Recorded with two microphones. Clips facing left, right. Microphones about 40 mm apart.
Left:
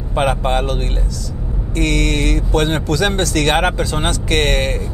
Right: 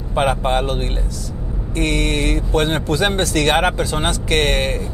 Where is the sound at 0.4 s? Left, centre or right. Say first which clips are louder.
Even; left.